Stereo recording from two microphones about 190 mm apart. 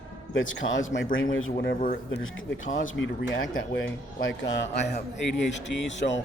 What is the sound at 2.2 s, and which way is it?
Speech, 90° left.